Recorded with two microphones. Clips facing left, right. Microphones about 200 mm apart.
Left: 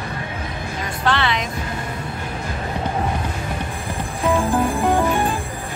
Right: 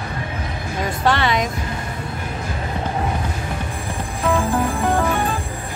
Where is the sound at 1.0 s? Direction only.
45° right (ahead or behind).